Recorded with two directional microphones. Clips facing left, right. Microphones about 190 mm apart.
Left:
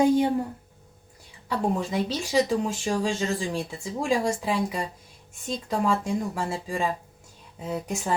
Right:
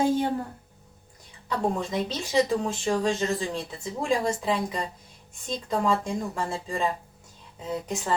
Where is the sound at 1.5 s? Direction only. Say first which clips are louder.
Left 1 dB; 10° left (ahead or behind).